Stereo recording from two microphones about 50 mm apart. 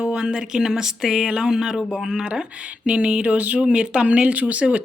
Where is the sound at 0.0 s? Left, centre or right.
Centre.